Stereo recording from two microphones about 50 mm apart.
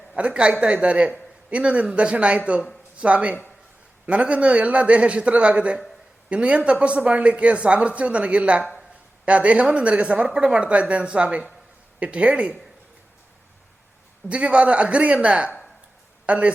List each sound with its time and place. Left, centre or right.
0.2 s speech: right
14.3 s speech: right